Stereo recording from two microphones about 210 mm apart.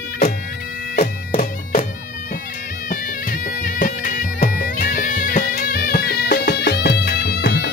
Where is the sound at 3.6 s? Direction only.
40° left (ahead or behind).